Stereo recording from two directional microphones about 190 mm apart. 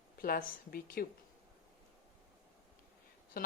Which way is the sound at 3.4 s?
50° left (ahead or behind).